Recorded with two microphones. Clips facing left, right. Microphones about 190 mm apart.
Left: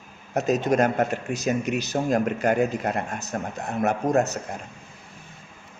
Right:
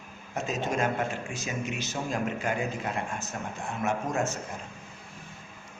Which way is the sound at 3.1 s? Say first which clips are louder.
Left 5 dB; 40° left (ahead or behind).